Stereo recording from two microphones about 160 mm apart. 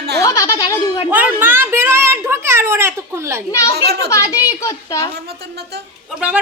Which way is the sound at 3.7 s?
90° right.